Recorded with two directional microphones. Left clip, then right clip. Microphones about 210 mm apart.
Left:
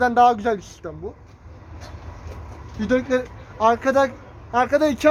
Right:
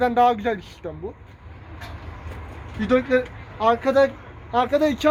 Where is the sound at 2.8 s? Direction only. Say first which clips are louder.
Right 1 dB; 30° left (ahead or behind).